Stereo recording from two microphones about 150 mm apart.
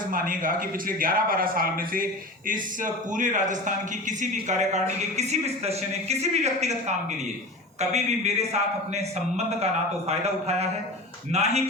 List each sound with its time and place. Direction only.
0.1 s a man's voice: 65° right (ahead or behind)
2.5 s a man's voice: 60° right (ahead or behind)
10.1 s a woman's voice: 45° right (ahead or behind)